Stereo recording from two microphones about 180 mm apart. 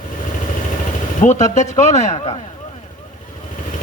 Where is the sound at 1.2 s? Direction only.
45° left (ahead or behind).